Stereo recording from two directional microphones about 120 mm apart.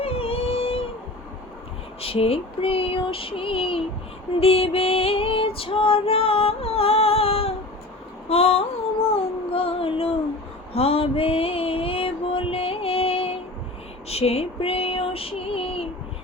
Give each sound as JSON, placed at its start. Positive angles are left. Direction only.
{"t": 0.0, "sound": "a sound", "side_deg": 55}
{"t": 2.0, "sound": "female singing", "side_deg": 55}
{"t": 9.0, "sound": "child singing", "side_deg": 50}
{"t": 10.8, "sound": "mantra", "side_deg": 55}
{"t": 14.1, "sound": "child singing", "side_deg": 60}